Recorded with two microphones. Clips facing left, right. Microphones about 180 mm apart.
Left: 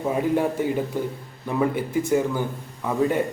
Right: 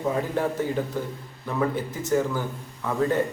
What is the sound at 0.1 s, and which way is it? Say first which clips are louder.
A man's voice: left 4 dB; 15° left (ahead or behind).